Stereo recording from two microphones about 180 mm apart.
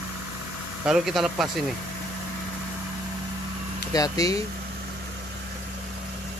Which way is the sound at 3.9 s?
20° left (ahead or behind).